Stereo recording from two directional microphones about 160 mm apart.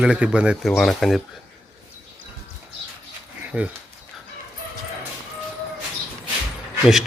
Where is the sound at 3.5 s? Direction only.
10° right (ahead or behind).